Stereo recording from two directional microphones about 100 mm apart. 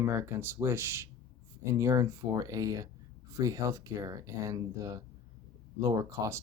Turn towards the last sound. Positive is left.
turn(degrees=-35)  # may be behind; listen again after turning